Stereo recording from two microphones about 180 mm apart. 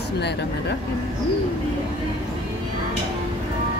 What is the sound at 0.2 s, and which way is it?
Speech, 70° left (ahead or behind).